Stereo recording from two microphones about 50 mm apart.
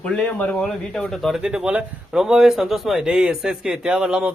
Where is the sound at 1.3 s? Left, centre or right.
Centre.